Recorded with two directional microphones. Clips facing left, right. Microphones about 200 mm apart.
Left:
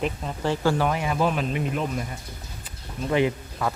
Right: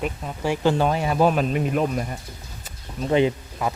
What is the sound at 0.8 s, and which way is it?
Speech, 30° right (ahead or behind).